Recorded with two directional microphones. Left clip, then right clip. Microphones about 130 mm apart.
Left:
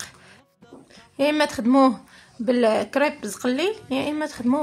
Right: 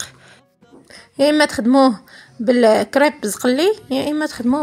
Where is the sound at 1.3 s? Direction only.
35° right (ahead or behind).